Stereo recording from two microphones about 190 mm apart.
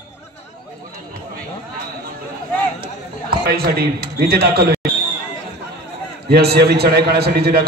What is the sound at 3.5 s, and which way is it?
A man's voice, 55° right (ahead or behind).